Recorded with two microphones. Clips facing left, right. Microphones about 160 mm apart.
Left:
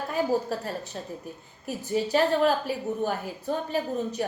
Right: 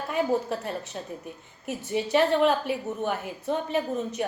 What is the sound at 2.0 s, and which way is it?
A woman's voice, 35° left (ahead or behind).